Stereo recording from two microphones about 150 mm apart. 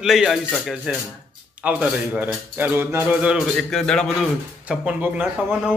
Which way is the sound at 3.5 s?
5° left (ahead or behind).